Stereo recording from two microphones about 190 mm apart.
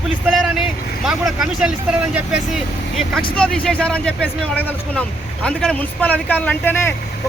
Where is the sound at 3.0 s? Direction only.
5° left (ahead or behind).